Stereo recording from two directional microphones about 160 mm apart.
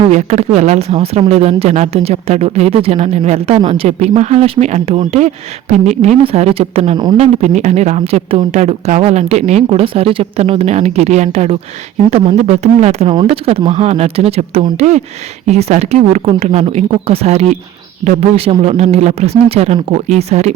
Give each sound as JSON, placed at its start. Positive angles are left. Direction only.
{"t": 0.1, "sound": "a woman's voice", "side_deg": -45}